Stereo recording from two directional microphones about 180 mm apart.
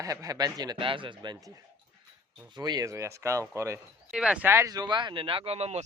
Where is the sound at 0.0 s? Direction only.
20° right (ahead or behind).